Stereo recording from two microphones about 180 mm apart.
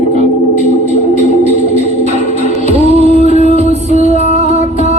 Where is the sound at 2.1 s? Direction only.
35° right (ahead or behind).